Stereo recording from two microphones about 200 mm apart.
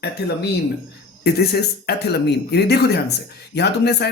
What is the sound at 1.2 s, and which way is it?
Speech, 50° left (ahead or behind).